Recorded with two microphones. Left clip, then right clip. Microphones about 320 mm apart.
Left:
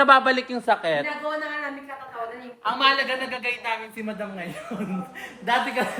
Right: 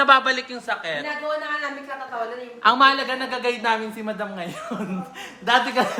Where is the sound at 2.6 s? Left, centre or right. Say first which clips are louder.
Right 5 dB; centre.